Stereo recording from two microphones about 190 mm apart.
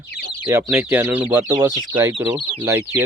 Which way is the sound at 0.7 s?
5° right (ahead or behind).